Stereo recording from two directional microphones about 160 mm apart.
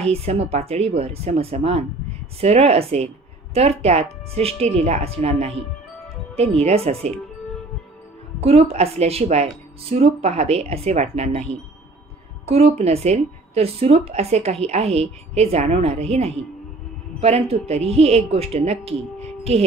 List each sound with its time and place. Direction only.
0.0 s speech: 40° right (ahead or behind)
8.4 s speech: 40° right (ahead or behind)